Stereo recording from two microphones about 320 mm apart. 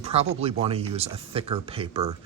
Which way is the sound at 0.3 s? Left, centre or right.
Centre.